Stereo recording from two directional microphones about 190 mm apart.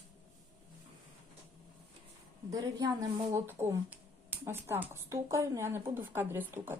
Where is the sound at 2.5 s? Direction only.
20° right (ahead or behind).